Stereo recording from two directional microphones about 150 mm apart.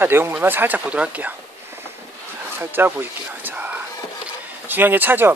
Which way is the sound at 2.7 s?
15° right (ahead or behind).